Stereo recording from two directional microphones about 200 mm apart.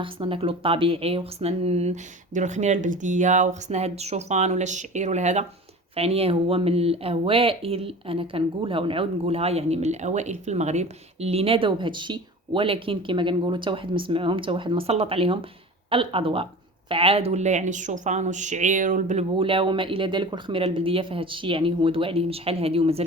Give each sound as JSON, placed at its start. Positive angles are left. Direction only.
{"t": 0.0, "sound": "speech", "side_deg": -25}